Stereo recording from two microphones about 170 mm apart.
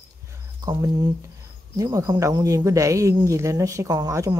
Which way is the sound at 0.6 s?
20° right (ahead or behind).